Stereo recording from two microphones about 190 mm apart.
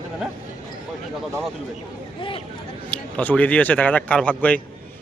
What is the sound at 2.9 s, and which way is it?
Speech, 5° left (ahead or behind).